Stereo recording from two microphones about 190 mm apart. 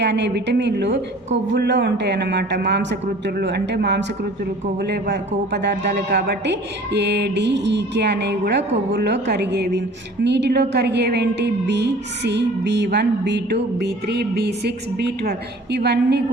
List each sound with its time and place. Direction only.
0.0 s a woman's voice: 65° right (ahead or behind)